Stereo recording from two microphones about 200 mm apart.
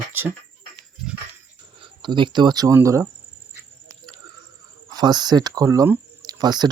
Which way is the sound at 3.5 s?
15° right (ahead or behind).